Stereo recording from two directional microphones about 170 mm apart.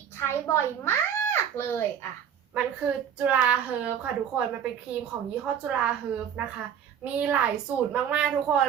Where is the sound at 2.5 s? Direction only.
10° right (ahead or behind).